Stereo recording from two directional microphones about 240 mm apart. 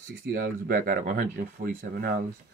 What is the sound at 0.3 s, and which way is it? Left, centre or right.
Speech, right.